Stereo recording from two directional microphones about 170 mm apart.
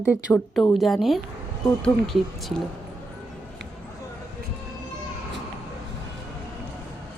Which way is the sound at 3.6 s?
90° right.